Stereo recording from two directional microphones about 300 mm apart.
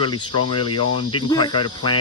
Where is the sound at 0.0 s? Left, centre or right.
Centre.